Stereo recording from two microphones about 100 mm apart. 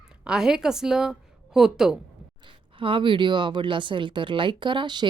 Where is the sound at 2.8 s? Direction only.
60° right (ahead or behind).